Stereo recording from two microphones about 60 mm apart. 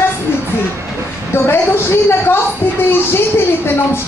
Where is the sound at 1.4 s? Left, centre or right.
Left.